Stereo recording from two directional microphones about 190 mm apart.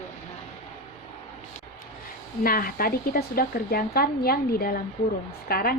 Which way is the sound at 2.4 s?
50° left (ahead or behind).